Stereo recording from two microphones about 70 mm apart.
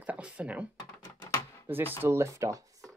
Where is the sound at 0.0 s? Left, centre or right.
Centre.